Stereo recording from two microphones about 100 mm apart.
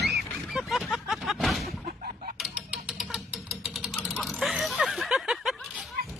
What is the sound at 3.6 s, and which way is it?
Engine, 5° right (ahead or behind).